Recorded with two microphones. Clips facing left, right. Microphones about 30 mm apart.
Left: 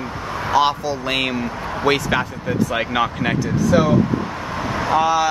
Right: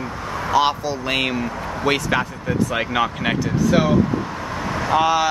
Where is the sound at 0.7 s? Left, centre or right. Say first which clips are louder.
Left 1 dB; centre.